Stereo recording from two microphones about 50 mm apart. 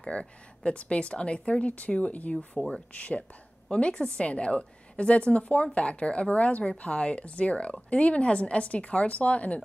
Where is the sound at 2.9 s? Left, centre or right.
Left.